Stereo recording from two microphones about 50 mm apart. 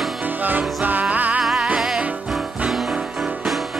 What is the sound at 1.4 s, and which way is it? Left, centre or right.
Music, centre.